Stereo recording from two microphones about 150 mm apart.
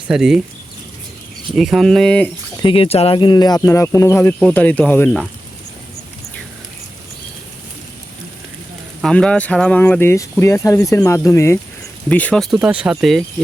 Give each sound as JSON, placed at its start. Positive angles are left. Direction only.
{"t": 0.1, "sound": "speech", "side_deg": -5}
{"t": 1.5, "sound": "speech", "side_deg": 0}
{"t": 2.6, "sound": "speech", "side_deg": 35}
{"t": 3.2, "sound": "speech", "side_deg": 30}
{"t": 9.0, "sound": "speech", "side_deg": 5}
{"t": 12.5, "sound": "speech", "side_deg": -10}